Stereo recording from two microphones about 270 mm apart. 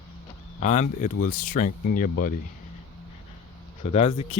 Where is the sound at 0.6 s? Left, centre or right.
Left.